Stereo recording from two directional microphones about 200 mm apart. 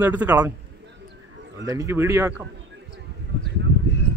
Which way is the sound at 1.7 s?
15° right (ahead or behind).